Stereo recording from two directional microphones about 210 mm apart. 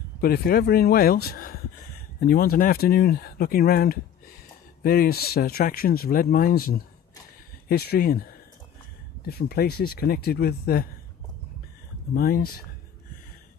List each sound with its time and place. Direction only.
0.2 s speech: 45° left (ahead or behind)
12.1 s speech: 45° left (ahead or behind)